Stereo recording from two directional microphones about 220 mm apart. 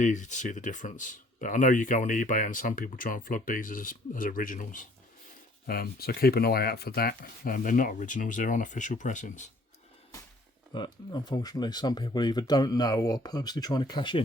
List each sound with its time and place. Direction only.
0.0 s speech: 35° left (ahead or behind)
10.7 s speech: 20° left (ahead or behind)